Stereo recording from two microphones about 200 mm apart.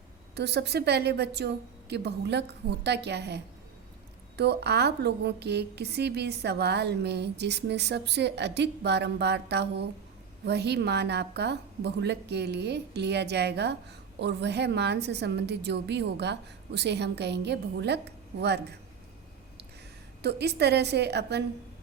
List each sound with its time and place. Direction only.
0.3 s a woman's voice: 55° right (ahead or behind)
20.2 s a woman's voice: 55° right (ahead or behind)